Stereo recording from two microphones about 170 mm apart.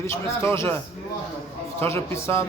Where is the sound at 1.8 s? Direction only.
15° left (ahead or behind).